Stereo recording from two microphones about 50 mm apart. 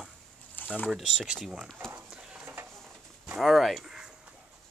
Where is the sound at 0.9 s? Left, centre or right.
Centre.